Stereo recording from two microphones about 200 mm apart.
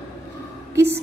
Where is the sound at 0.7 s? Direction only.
10° right (ahead or behind).